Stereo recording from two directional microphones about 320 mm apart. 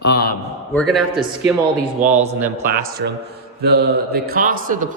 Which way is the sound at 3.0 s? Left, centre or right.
Right.